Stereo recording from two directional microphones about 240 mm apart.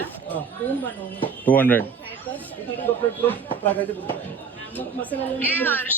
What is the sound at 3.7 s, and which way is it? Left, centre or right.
Speech, centre.